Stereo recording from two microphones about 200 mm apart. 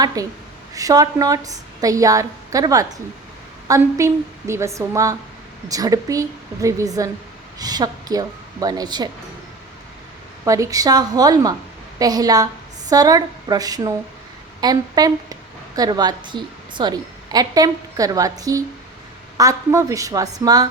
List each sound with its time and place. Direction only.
0.2 s a woman's voice: 20° right (ahead or behind)
10.4 s a woman's voice: 15° right (ahead or behind)